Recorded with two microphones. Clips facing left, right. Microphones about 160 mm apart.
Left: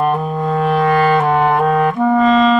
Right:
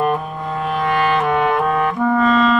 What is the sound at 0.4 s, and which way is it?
Music, 45° left (ahead or behind).